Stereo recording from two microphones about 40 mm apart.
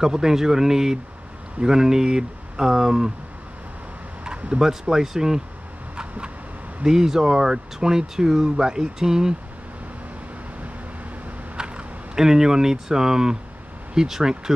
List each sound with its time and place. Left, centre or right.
0.0 s speech: centre
4.2 s a sound: right
4.6 s speech: centre
5.9 s vehicle: right
6.8 s speech: centre
11.5 s a sound: right
12.2 s speech: centre